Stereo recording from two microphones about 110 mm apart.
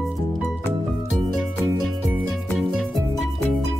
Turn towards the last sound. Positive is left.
turn(degrees=-5)  # may be behind; listen again after turning